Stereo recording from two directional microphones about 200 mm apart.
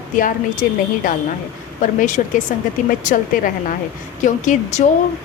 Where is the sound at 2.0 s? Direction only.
40° left (ahead or behind).